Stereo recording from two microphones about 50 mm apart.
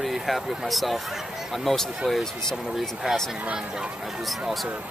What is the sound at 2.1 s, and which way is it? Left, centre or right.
Speech, centre.